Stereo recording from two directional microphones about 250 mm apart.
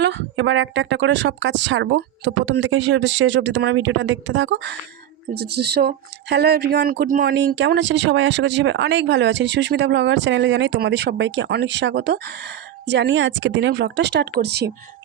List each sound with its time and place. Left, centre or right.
0.0 s speech: right